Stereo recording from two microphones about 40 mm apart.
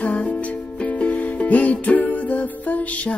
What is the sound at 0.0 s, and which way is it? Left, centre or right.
Music, left.